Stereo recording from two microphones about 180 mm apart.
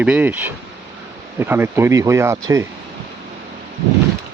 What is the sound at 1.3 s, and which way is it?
Speech, 10° right (ahead or behind).